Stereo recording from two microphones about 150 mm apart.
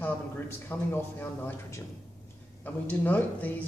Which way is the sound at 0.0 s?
15° left (ahead or behind).